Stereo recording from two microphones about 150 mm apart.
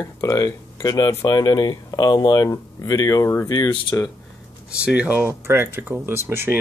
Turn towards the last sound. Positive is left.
turn(degrees=-15)  # may be behind; listen again after turning